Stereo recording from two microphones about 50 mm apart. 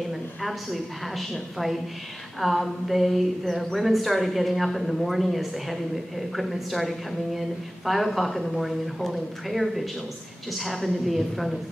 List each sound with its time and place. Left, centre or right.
0.1 s a woman's voice: centre